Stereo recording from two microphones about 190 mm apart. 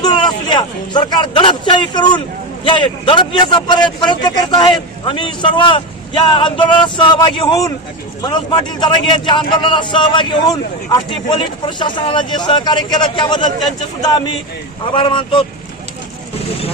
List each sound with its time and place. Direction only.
0.0 s a man's voice: 25° left (ahead or behind)
8.8 s a man's voice: 25° left (ahead or behind)
14.9 s a man's voice: 25° left (ahead or behind)